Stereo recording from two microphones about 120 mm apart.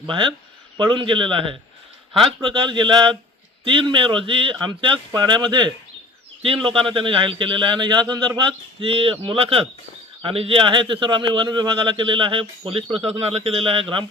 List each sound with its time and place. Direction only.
0.0 s a man's voice: 45° right (ahead or behind)